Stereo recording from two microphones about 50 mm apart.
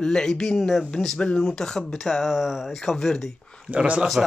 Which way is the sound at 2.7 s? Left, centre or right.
Centre.